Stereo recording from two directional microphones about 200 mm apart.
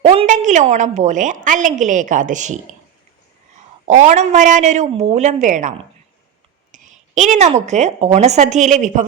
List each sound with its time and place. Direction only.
0.2 s a woman's voice: 40° right (ahead or behind)
3.8 s a woman's voice: 35° right (ahead or behind)